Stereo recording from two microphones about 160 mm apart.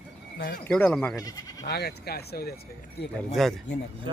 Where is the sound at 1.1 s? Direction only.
20° left (ahead or behind).